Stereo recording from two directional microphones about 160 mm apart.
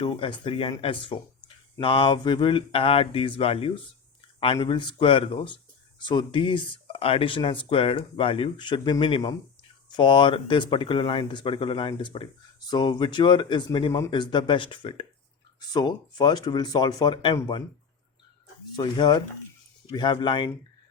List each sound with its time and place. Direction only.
0.0 s speech: 30° left (ahead or behind)
18.8 s speech: 25° left (ahead or behind)